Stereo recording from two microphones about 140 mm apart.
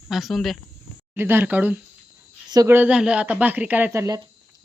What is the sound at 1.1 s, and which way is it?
Speech, 15° right (ahead or behind).